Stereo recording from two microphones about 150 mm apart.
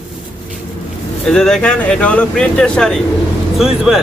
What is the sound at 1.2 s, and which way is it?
Speech, 5° left (ahead or behind).